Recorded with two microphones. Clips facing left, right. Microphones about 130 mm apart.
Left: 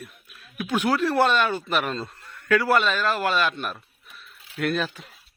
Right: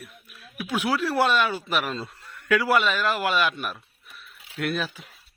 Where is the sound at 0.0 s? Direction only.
Centre (ahead or behind).